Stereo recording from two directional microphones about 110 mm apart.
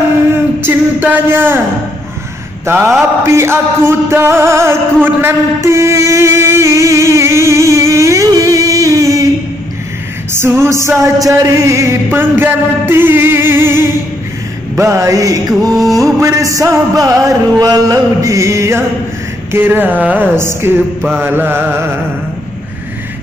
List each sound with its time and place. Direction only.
0.6 s music: 20° right (ahead or behind)
2.6 s a sound: 20° right (ahead or behind)
3.3 s music: 25° right (ahead or behind)
10.3 s music: 20° right (ahead or behind)
15.7 s music: centre (ahead or behind)
16.2 s music: 30° right (ahead or behind)